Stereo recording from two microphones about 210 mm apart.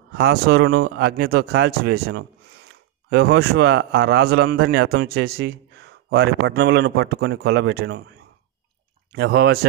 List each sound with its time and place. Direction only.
0.1 s a man's voice: 50° right (ahead or behind)
9.1 s a man's voice: 50° right (ahead or behind)